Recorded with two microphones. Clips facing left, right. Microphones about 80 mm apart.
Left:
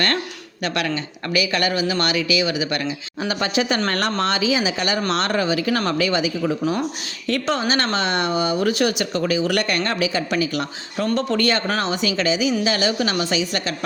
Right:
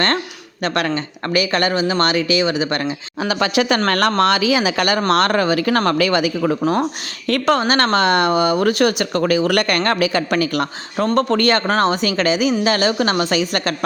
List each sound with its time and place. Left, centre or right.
0.6 s speech: right
3.2 s speech: right
3.8 s speech: right
4.2 s speech: right